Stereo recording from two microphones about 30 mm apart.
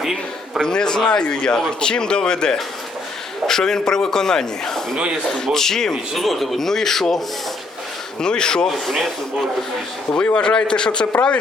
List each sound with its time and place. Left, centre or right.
0.0 s a sound: centre
0.6 s a man's voice: left
6.1 s a man's voice: centre
8.2 s a man's voice: left
10.3 s a man's voice: left